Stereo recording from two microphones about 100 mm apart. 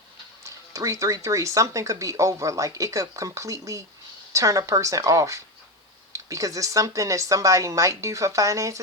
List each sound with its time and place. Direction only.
0.4 s speech: 30° right (ahead or behind)